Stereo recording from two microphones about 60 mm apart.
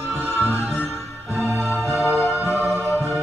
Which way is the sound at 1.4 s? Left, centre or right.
Centre.